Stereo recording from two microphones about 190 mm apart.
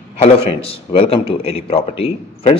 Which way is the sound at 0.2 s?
30° left (ahead or behind).